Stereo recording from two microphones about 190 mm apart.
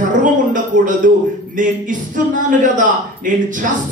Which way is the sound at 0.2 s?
45° right (ahead or behind).